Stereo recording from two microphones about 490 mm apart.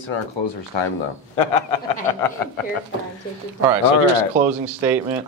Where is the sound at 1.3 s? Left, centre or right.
Left.